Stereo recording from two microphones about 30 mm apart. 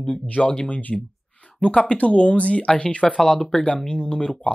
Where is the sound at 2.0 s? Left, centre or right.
Left.